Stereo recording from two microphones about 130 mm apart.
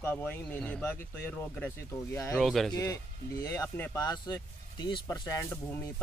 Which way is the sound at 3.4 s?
25° left (ahead or behind).